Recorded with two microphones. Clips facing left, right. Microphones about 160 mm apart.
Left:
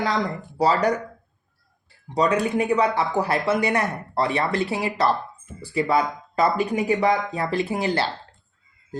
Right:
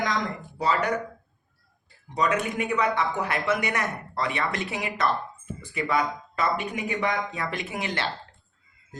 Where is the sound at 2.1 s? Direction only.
35° left (ahead or behind).